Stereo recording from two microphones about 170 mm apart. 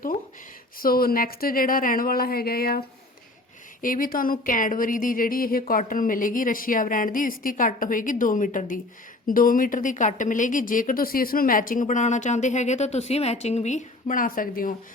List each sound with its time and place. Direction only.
0.8 s a woman's voice: 60° left (ahead or behind)